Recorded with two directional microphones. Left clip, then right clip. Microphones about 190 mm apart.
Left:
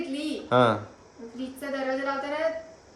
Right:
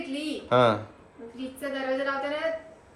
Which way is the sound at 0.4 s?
15° left (ahead or behind).